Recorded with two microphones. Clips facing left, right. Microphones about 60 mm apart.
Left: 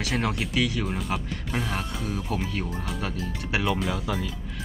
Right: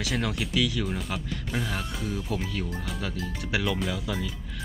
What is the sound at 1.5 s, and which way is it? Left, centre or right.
Speech, left.